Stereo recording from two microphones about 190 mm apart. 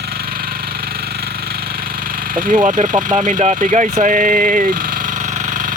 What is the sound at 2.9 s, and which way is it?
Speech, 20° right (ahead or behind).